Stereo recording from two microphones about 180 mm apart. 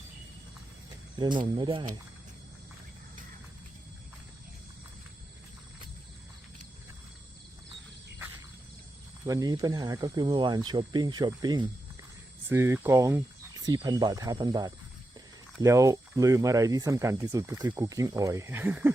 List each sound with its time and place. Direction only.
1.2 s speech: 25° right (ahead or behind)
9.2 s speech: 20° right (ahead or behind)